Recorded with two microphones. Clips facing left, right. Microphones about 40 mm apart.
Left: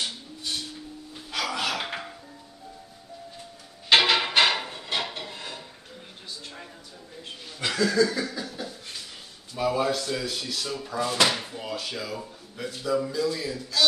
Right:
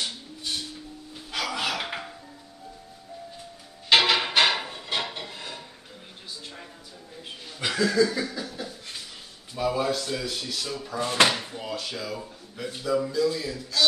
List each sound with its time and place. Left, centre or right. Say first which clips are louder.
1.3 s a sound: even; centre
3.9 s music: even; centre
7.6 s chuckle: even; centre
9.6 s speech: left 1 dB; centre
11.0 s speech: right 2 dB; right
11.3 s speech: even; centre